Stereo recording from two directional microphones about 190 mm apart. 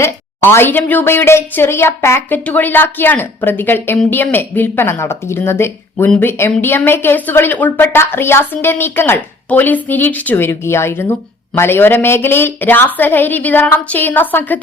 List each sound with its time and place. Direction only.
0.0 s a woman's voice: 10° left (ahead or behind)